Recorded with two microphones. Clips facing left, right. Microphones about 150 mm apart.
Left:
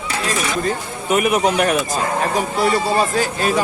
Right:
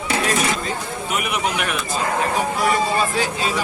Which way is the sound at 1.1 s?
45° left (ahead or behind).